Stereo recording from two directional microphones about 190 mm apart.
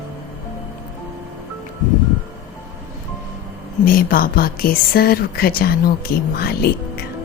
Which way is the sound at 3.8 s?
50° left (ahead or behind).